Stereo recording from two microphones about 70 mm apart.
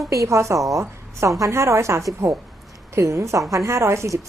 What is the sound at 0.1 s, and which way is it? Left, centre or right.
A woman's voice, right.